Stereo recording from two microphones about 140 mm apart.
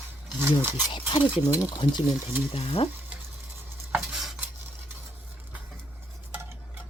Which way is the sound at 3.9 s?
5° right (ahead or behind).